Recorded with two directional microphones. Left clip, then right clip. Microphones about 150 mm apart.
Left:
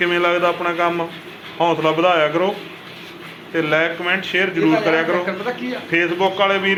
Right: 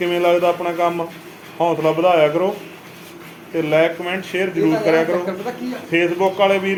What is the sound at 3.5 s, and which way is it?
A man's voice, 15° right (ahead or behind).